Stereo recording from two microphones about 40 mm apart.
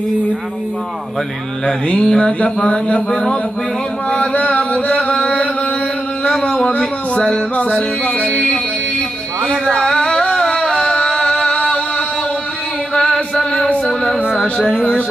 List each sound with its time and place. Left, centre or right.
1.9 s mantra: left
4.3 s mantra: left
6.2 s a sound: centre
6.8 s speech: centre
7.5 s music: left
9.5 s a sound: left
12.9 s chant: centre
14.4 s mantra: centre
14.8 s music: left